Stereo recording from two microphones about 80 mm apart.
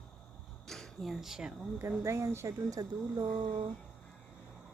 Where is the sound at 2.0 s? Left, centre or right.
Right.